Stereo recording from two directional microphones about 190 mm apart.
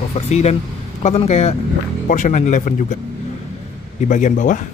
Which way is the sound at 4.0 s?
40° left (ahead or behind).